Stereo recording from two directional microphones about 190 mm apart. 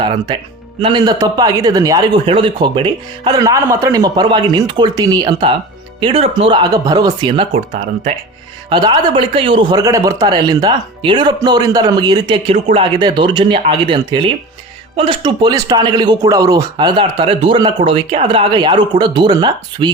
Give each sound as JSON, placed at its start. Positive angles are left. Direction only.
{"t": 0.8, "sound": "a man's voice", "side_deg": -25}